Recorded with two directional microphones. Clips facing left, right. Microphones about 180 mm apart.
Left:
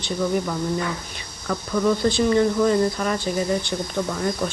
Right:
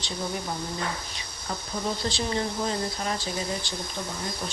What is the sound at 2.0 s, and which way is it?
Speech, 55° left (ahead or behind).